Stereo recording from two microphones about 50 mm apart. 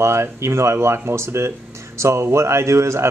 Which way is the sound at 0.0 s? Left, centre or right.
Right.